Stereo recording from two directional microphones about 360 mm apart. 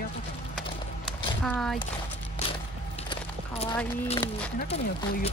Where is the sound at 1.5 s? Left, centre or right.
Centre.